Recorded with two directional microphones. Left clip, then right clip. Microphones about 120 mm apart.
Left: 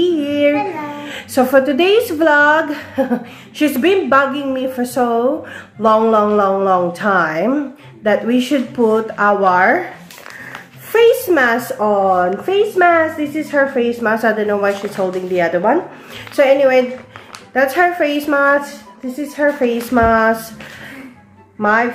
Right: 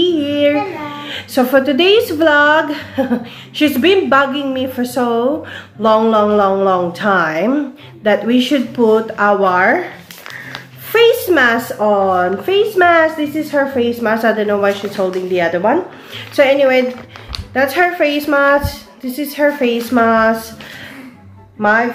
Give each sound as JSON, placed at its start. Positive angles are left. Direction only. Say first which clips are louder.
{"t": 0.0, "sound": "a child's voice", "louder": "right 1 dB", "side_deg": -5}
{"t": 11.0, "sound": "a child's voice", "louder": "right 1 dB", "side_deg": -10}
{"t": 12.1, "sound": "a child's voice", "louder": "right 1 dB", "side_deg": -15}
{"t": 19.6, "sound": "a woman's voice", "louder": "right 1 dB", "side_deg": -5}
{"t": 21.5, "sound": "speech", "louder": "right 1 dB", "side_deg": 0}